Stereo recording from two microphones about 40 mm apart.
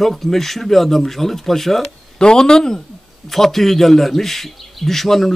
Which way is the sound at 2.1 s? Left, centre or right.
Centre.